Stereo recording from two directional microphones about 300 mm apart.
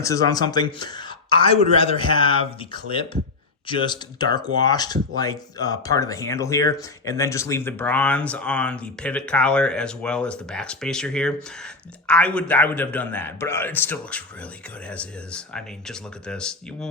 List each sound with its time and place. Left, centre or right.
0.0 s a man's voice: centre